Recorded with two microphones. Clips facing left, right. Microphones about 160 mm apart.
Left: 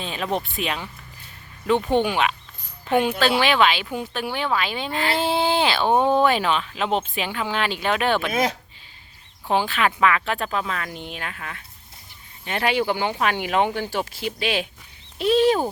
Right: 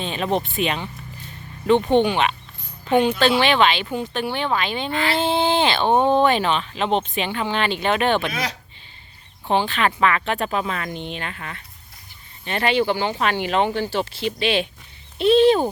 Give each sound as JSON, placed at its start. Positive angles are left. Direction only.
{"t": 0.0, "sound": "speech", "side_deg": 0}
{"t": 8.3, "sound": "speech", "side_deg": 50}
{"t": 9.5, "sound": "speech", "side_deg": 5}